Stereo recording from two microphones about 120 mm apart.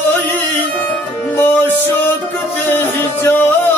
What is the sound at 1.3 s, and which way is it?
Music, 15° left (ahead or behind).